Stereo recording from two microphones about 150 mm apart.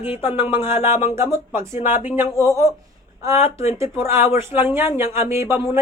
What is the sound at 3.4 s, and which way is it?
Speech, 40° left (ahead or behind).